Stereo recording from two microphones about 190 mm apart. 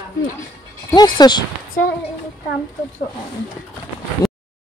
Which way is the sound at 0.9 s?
20° left (ahead or behind).